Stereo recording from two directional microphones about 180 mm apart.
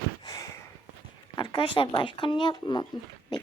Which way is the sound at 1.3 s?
25° left (ahead or behind).